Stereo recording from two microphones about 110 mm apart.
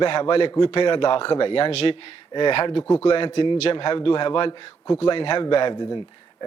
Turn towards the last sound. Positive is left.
turn(degrees=45)  # may be behind; listen again after turning